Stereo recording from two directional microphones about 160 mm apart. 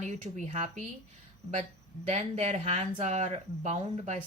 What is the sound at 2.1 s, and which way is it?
Speech, 45° right (ahead or behind).